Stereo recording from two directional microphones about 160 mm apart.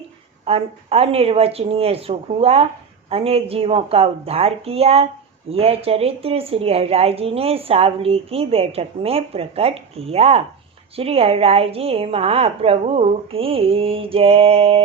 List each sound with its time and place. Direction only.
0.4 s a woman's voice: 40° right (ahead or behind)